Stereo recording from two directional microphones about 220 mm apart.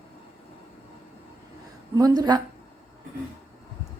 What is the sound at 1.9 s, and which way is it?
Speech, 15° right (ahead or behind).